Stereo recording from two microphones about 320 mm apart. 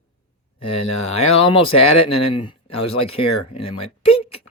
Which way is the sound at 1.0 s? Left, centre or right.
Centre.